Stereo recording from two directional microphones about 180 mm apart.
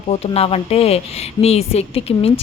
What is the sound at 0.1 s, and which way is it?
A woman's voice, 35° left (ahead or behind).